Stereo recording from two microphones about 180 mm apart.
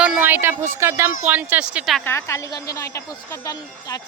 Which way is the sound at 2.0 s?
15° left (ahead or behind).